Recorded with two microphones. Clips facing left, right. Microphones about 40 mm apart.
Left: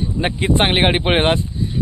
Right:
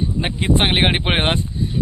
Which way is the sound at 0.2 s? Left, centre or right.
Centre.